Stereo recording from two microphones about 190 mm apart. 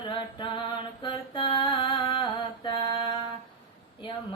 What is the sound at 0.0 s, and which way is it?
Mantra, 25° left (ahead or behind).